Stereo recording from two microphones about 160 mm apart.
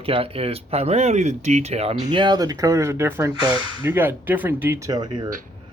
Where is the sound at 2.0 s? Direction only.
25° right (ahead or behind); by 4.8 s 10° right (ahead or behind).